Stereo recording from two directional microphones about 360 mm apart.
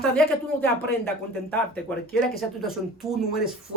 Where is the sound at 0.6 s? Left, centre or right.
Centre.